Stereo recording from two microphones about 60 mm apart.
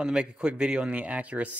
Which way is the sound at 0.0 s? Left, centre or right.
Centre.